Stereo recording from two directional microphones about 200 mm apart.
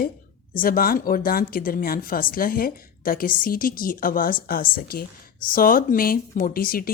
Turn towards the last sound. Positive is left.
turn(degrees=45)  # may be behind; listen again after turning